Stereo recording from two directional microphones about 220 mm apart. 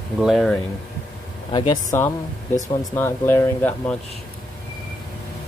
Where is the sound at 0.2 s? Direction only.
Centre (ahead or behind).